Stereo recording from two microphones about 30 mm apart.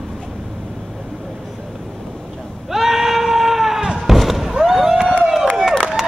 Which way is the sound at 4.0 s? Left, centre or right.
Centre.